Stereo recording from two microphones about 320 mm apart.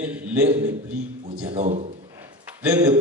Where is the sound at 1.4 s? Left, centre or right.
Centre.